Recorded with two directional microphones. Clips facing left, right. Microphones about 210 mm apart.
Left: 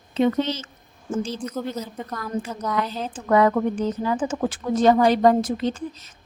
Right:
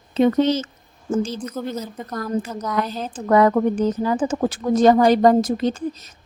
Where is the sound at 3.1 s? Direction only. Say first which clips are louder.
Right 3 dB; 40° right (ahead or behind).